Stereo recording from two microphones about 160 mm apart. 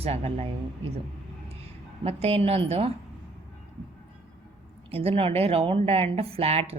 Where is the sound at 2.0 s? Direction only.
40° right (ahead or behind).